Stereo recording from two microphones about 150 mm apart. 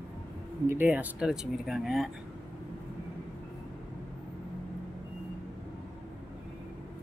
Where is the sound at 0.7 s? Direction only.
10° right (ahead or behind).